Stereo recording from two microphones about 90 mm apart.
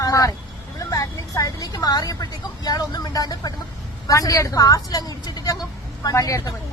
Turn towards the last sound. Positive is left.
turn(degrees=40)  # may be behind; listen again after turning